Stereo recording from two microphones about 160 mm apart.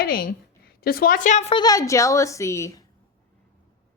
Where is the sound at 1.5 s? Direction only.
25° left (ahead or behind).